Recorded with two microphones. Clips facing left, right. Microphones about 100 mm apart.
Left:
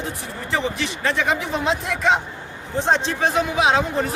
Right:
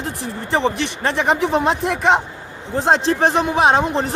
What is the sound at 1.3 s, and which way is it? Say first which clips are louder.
Speech: right 5 dB; 65° right (ahead or behind).